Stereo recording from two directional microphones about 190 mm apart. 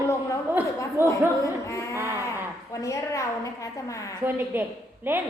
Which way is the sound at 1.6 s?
15° left (ahead or behind).